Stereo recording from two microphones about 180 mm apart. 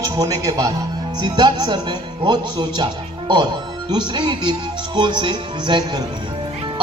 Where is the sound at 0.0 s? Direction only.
20° right (ahead or behind).